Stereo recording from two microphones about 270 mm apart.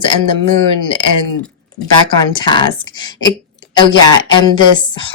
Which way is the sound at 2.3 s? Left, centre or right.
Centre.